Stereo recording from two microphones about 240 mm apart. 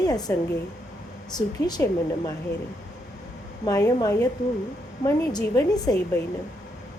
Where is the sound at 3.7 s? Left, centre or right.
Centre.